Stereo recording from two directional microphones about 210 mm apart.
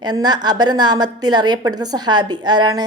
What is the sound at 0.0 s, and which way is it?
A woman's voice, 20° right (ahead or behind).